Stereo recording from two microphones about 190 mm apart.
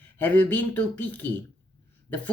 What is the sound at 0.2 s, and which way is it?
Speech, 10° left (ahead or behind).